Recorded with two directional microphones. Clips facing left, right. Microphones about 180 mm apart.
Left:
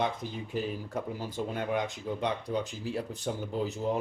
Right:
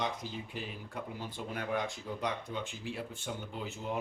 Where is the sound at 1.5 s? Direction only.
20° left (ahead or behind).